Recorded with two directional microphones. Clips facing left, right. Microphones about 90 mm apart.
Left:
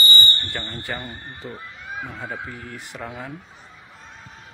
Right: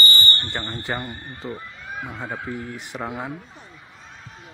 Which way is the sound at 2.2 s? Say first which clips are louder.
Right 2 dB; 20° right (ahead or behind).